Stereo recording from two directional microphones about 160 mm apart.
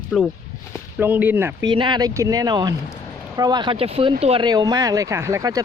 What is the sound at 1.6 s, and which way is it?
Speech, 30° right (ahead or behind).